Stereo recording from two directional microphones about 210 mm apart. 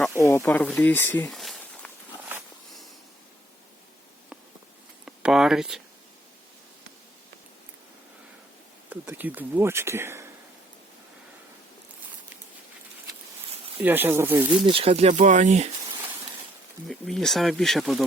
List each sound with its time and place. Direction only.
0.2 s speech: 15° left (ahead or behind)
5.0 s a sound: 5° right (ahead or behind)
8.9 s speech: 10° right (ahead or behind)
13.7 s speech: 10° right (ahead or behind)
14.6 s speech: 25° right (ahead or behind)
16.9 s speech: centre (ahead or behind)